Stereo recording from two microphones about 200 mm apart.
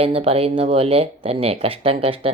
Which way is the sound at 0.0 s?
30° right (ahead or behind).